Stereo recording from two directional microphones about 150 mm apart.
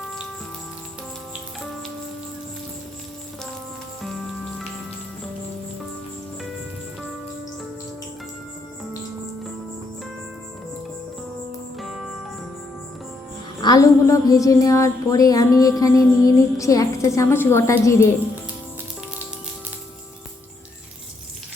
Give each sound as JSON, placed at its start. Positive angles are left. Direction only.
{"t": 11.8, "sound": "music", "side_deg": 0}
{"t": 13.6, "sound": "a woman's voice", "side_deg": 25}